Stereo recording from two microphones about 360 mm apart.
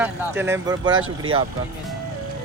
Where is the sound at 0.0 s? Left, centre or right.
Centre.